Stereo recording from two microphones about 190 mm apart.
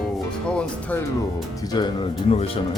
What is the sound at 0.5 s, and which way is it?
Speech, 5° left (ahead or behind).